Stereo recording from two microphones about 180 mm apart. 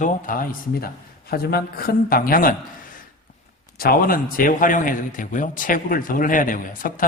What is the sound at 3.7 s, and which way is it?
A man's voice, 55° left (ahead or behind).